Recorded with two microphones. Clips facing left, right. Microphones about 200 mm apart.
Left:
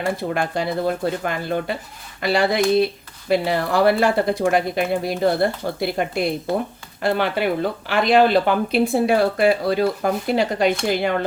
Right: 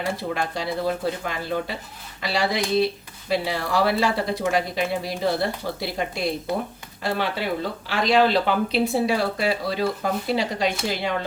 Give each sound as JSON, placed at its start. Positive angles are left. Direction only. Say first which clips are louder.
{"t": 0.2, "sound": "speech", "louder": "left 4 dB", "side_deg": 55}